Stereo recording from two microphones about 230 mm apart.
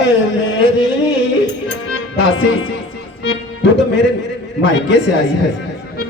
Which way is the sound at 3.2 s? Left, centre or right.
Left.